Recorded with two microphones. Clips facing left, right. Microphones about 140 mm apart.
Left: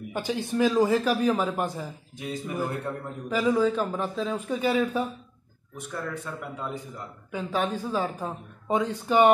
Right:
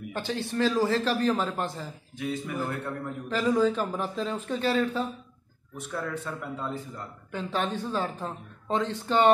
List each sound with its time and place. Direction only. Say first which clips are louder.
0.1 s a man's voice: left 3 dB; 10° left (ahead or behind)